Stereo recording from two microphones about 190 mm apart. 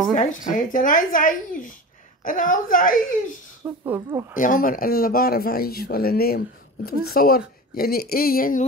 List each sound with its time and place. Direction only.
0.1 s speech: 45° left (ahead or behind)
3.6 s speech: 10° right (ahead or behind)
4.4 s speech: 45° left (ahead or behind)